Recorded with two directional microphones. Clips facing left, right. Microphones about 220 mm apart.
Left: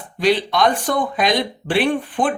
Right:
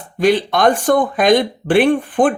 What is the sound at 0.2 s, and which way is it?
Speech, 50° right (ahead or behind).